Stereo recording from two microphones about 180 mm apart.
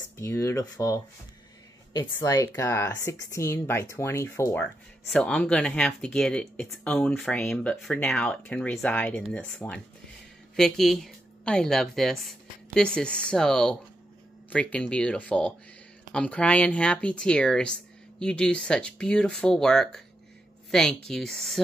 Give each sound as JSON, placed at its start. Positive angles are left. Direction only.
{"t": 0.2, "sound": "speech", "side_deg": 15}
{"t": 5.1, "sound": "a woman's voice", "side_deg": 5}